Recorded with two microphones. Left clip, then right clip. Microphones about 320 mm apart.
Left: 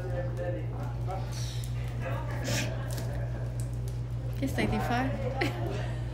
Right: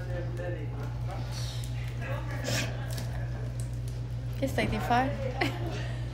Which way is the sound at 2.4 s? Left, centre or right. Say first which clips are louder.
Right 1 dB; centre.